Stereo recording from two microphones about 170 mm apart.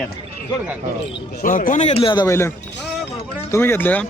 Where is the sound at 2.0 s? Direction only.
25° left (ahead or behind).